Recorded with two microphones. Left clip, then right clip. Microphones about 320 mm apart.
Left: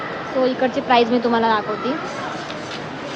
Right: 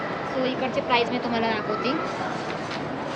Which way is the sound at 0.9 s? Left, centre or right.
Centre.